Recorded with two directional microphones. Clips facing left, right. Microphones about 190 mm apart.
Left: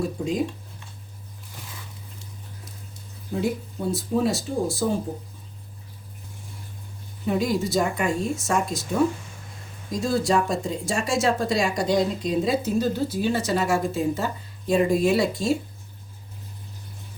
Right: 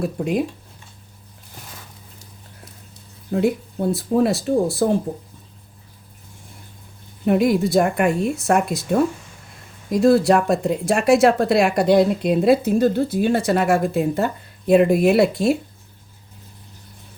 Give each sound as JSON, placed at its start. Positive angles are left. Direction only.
{"t": 0.0, "sound": "speech", "side_deg": -65}
{"t": 3.3, "sound": "speech", "side_deg": -60}
{"t": 7.3, "sound": "speech", "side_deg": -60}